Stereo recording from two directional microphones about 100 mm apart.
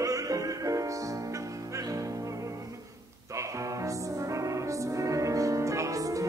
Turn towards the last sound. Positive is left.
turn(degrees=-35)  # may be behind; listen again after turning